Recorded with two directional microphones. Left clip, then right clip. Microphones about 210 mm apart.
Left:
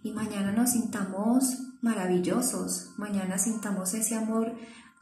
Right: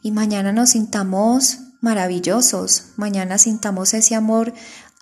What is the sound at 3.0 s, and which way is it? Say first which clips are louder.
A woman's voice: right 11 dB; 50° right (ahead or behind).